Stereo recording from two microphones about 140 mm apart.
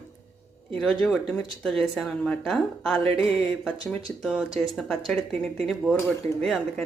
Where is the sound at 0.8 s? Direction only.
5° left (ahead or behind).